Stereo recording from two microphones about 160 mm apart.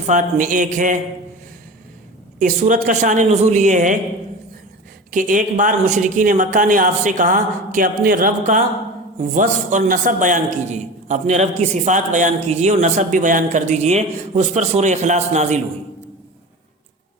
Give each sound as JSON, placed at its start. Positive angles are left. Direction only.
{"t": 0.0, "sound": "a man's voice", "side_deg": -50}
{"t": 2.4, "sound": "a man's voice", "side_deg": -55}
{"t": 5.1, "sound": "a man's voice", "side_deg": -55}